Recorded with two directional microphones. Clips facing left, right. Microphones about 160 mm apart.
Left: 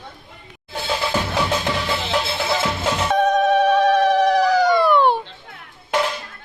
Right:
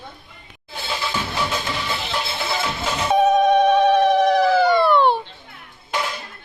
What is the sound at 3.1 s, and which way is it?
Telephone, centre (ahead or behind).